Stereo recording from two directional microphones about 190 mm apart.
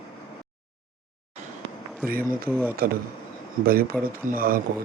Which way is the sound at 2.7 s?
50° right (ahead or behind).